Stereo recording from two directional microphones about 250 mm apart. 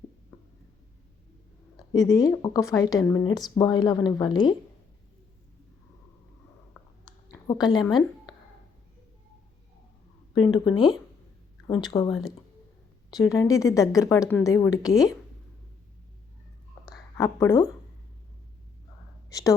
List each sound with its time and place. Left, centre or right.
2.0 s a woman's voice: centre
6.8 s a sound: centre
7.4 s a woman's voice: centre
10.3 s a woman's voice: centre
17.2 s a woman's voice: centre
19.3 s a woman's voice: centre